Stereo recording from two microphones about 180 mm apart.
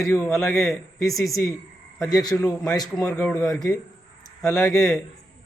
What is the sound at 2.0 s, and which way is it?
A man's voice, 20° left (ahead or behind).